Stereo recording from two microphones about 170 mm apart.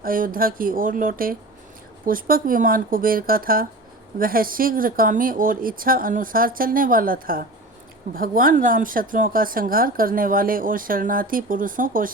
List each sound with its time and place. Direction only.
0.0 s speech: 55° right (ahead or behind)